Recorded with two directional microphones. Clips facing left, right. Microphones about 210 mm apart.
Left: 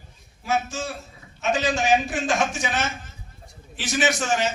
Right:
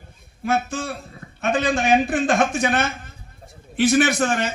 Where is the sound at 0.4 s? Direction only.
55° right (ahead or behind).